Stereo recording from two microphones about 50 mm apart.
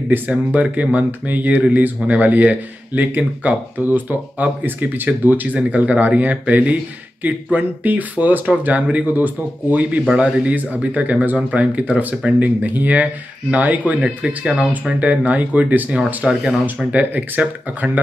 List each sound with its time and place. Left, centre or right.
0.1 s speech: right
10.0 s speech: right
10.5 s speech: right
14.0 s speech: centre; by 15.9 s right
16.2 s speech: centre
16.6 s speech: right